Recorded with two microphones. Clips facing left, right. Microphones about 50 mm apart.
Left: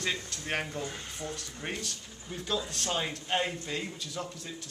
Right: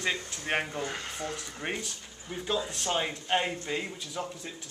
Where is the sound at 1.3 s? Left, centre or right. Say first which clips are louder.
Right 3 dB; centre.